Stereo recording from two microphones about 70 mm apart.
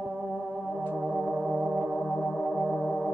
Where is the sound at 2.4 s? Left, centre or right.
Centre.